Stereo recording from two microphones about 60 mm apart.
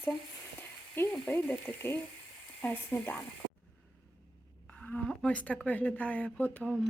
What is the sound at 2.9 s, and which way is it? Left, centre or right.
Speech, left.